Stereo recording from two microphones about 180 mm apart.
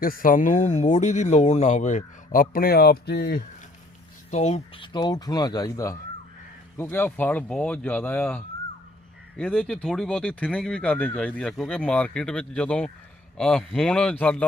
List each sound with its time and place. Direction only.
0.0 s speech: 50° left (ahead or behind)
4.3 s speech: 40° left (ahead or behind); by 14.4 s 5° left (ahead or behind)